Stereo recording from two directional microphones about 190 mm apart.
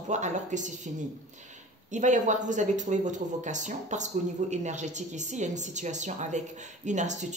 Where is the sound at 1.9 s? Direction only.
40° right (ahead or behind).